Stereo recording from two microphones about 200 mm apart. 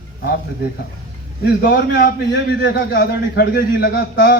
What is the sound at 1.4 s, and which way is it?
A man's voice, 55° left (ahead or behind).